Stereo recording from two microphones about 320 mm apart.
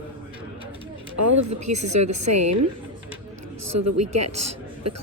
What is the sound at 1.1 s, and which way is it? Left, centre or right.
Speech, right.